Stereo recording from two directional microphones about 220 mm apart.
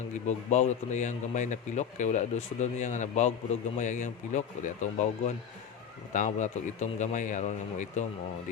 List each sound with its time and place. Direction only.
0.3 s speech: 30° left (ahead or behind)